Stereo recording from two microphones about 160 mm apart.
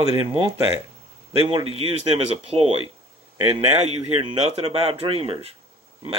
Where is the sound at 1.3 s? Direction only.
35° right (ahead or behind).